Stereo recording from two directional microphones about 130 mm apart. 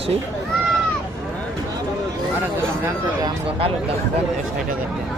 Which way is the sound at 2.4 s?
20° right (ahead or behind).